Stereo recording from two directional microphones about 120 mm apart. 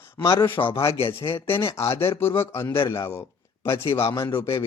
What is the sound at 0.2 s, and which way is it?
A man's voice, 25° left (ahead or behind).